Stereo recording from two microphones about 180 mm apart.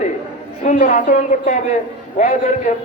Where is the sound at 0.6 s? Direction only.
45° left (ahead or behind).